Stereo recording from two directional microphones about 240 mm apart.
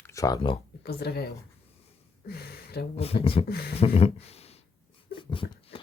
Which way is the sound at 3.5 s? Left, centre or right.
Left.